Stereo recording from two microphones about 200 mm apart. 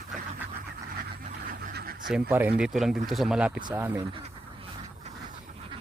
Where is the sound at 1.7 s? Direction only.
50° right (ahead or behind).